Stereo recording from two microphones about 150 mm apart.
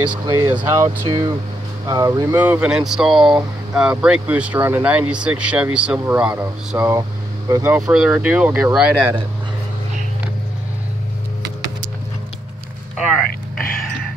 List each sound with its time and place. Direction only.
0.3 s speech: 15° right (ahead or behind)
2.3 s speech: 10° right (ahead or behind)
6.8 s speech: 20° right (ahead or behind)
7.7 s speech: 5° right (ahead or behind)